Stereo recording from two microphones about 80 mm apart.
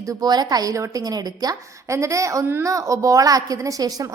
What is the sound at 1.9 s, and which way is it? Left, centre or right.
A woman's voice, right.